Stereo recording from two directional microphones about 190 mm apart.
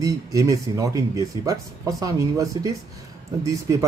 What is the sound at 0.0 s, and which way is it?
Speech, 15° right (ahead or behind).